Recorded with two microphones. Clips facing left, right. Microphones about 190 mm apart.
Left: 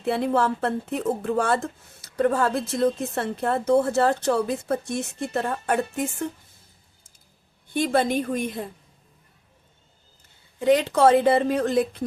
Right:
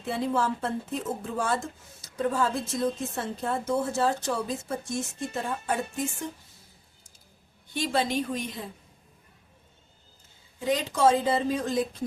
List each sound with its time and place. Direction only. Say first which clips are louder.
0.0 s speech: left 5 dB; 65° left (ahead or behind)
7.7 s a woman's voice: left 5 dB; 55° left (ahead or behind)
10.6 s speech: left 6 dB; 65° left (ahead or behind)